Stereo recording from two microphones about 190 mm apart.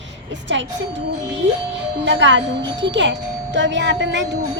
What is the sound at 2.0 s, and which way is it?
Speech, 70° right (ahead or behind).